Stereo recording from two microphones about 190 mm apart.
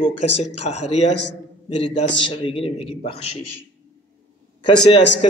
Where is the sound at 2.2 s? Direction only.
30° left (ahead or behind).